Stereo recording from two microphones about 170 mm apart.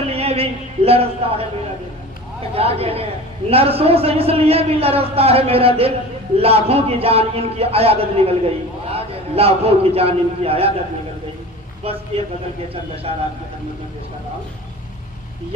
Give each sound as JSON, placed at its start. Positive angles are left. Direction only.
{"t": 0.1, "sound": "a sound", "side_deg": -35}
{"t": 0.9, "sound": "a man's voice", "side_deg": -35}
{"t": 2.6, "sound": "a man's voice", "side_deg": -35}
{"t": 11.8, "sound": "a man's voice", "side_deg": -35}